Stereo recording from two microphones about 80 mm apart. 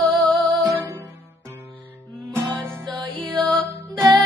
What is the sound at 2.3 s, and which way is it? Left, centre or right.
Music, right.